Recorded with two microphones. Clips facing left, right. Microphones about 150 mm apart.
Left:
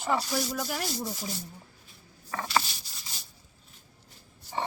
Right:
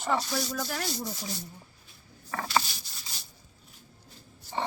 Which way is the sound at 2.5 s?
Centre (ahead or behind).